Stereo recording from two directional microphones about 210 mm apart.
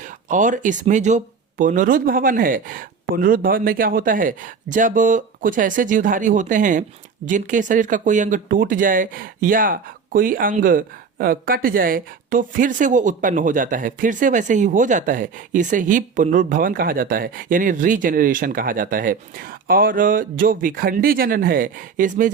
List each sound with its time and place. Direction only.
0.0 s speech: 35° right (ahead or behind)